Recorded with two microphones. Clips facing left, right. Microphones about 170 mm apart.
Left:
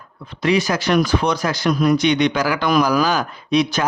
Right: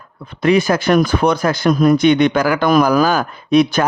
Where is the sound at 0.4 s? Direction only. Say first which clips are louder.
Right 5 dB; 50° right (ahead or behind).